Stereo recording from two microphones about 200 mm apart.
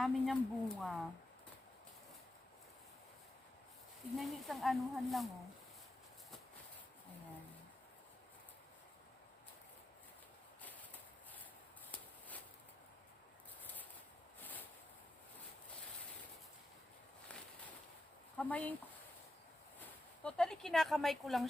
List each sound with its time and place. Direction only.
0.0 s speech: centre (ahead or behind)
4.2 s speech: centre (ahead or behind)
18.3 s speech: 5° left (ahead or behind)
19.8 s speech: 5° left (ahead or behind)